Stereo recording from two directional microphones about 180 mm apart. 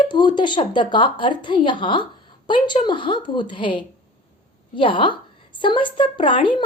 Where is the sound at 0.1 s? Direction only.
25° left (ahead or behind).